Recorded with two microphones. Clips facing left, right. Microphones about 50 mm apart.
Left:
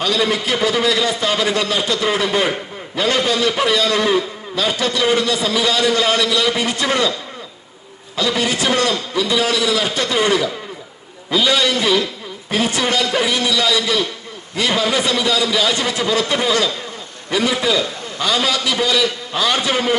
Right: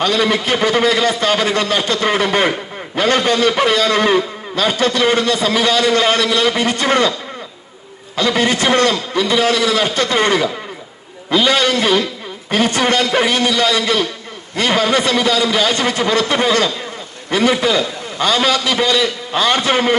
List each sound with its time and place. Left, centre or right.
0.0 s a man's voice: right
8.1 s a man's voice: right